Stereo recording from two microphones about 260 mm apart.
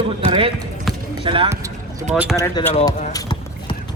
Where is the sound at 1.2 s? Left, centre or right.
Centre.